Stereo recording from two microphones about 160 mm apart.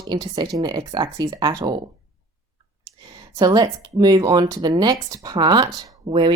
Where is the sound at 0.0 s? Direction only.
25° right (ahead or behind).